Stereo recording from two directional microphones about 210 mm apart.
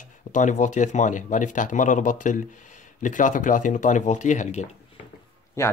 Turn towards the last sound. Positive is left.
turn(degrees=15)  # may be behind; listen again after turning